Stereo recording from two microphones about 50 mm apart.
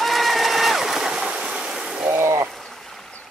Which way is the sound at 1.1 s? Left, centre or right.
Centre.